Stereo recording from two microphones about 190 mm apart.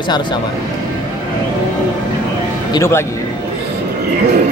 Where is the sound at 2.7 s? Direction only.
15° left (ahead or behind).